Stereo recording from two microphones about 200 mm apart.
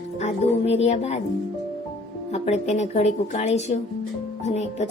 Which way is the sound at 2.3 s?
35° left (ahead or behind).